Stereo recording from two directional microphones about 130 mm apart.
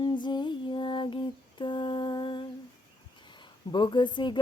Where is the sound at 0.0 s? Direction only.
35° left (ahead or behind).